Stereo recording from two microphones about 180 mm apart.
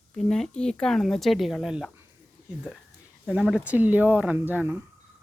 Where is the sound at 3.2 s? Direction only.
5° right (ahead or behind).